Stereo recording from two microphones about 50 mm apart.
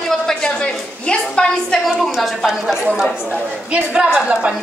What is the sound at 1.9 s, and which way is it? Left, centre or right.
Speech, centre.